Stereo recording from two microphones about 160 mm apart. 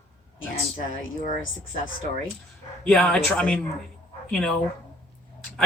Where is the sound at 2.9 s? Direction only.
5° left (ahead or behind).